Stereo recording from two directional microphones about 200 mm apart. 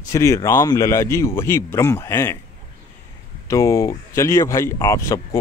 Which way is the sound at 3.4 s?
15° left (ahead or behind).